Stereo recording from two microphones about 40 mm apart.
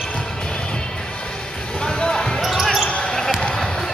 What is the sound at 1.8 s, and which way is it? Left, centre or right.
Basketball bounce, centre.